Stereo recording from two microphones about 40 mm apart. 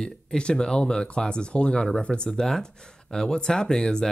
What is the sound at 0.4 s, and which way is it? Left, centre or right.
Speech, left.